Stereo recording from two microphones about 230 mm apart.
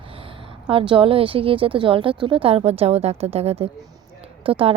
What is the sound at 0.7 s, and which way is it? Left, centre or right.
Speech, right.